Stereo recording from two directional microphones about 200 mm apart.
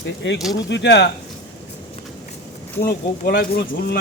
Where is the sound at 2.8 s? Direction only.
50° left (ahead or behind).